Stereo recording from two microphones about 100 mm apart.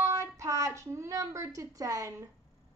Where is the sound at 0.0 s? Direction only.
30° right (ahead or behind).